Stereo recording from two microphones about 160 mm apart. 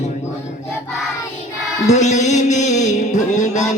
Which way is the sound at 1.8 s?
45° left (ahead or behind).